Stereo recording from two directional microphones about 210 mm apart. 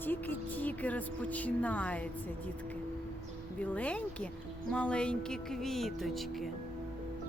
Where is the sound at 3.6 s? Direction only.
5° left (ahead or behind).